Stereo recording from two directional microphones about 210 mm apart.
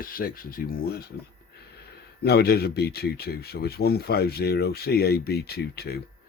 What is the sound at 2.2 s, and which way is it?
Speech, 50° left (ahead or behind).